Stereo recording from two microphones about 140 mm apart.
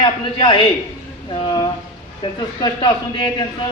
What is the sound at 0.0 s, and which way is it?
Speech, 35° left (ahead or behind).